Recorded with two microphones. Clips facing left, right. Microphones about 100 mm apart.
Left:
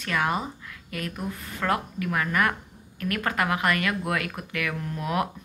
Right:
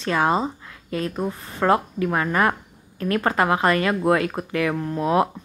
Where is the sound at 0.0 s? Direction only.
30° right (ahead or behind).